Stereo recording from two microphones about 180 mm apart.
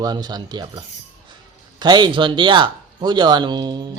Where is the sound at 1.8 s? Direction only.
25° right (ahead or behind).